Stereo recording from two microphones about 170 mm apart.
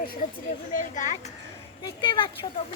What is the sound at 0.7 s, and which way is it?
Speech, 45° left (ahead or behind).